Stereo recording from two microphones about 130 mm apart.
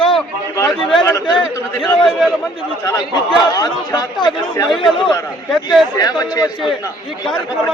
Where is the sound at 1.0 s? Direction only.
30° left (ahead or behind).